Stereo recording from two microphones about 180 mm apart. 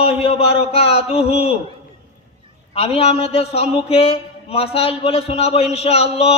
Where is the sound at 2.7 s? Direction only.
35° left (ahead or behind).